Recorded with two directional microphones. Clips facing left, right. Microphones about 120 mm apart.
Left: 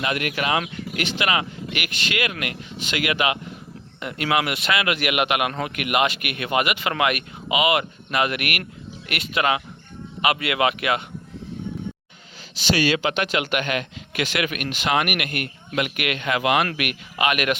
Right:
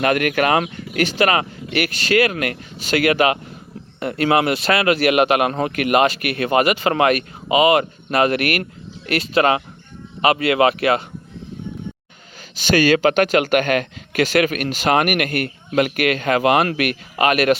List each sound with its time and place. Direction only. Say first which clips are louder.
0.0 s speech: right 8 dB; 50° right (ahead or behind); by 11.0 s 35° right (ahead or behind)
12.5 s speech: right 6 dB; 50° right (ahead or behind)